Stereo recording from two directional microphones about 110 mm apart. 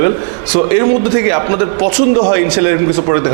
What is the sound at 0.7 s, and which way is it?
A man's voice, 15° right (ahead or behind).